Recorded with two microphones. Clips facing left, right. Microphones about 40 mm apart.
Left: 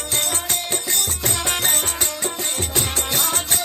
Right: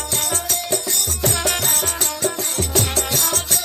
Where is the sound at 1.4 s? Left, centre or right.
Left.